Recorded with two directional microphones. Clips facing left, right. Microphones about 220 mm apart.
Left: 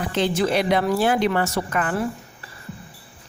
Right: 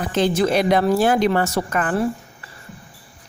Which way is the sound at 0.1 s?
45° right (ahead or behind).